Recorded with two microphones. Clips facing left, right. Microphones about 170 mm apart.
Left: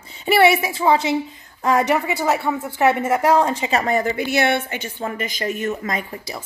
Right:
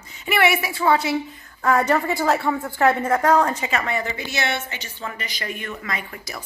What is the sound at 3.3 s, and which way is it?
A woman's voice, 25° left (ahead or behind).